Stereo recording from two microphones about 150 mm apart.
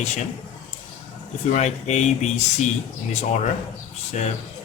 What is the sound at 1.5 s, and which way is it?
Speech, 50° left (ahead or behind).